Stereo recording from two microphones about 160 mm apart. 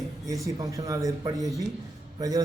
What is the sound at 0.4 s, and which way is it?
A man's voice, 20° right (ahead or behind).